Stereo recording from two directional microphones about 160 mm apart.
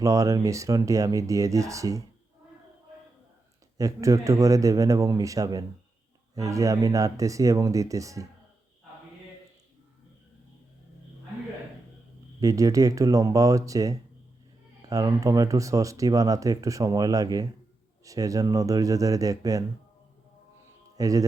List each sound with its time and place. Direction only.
0.0 s speech: 20° right (ahead or behind)
3.8 s speech: 20° right (ahead or behind)
12.4 s speech: 20° right (ahead or behind)
20.9 s speech: 20° right (ahead or behind)